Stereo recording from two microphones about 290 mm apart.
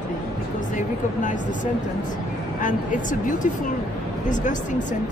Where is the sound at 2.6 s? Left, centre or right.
Left.